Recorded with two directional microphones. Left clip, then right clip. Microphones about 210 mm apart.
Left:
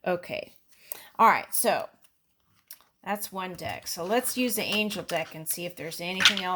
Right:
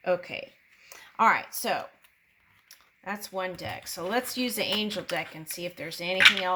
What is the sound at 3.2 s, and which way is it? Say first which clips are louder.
Speech: right 1 dB; 45° left (ahead or behind).